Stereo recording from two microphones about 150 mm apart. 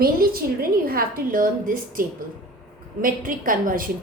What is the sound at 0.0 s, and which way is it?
A woman's voice, 80° right.